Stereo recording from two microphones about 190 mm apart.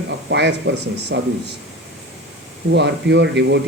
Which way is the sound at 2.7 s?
65° right (ahead or behind).